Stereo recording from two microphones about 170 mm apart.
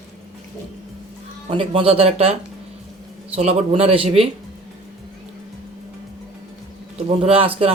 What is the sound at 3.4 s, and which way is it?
Speech, 40° right (ahead or behind).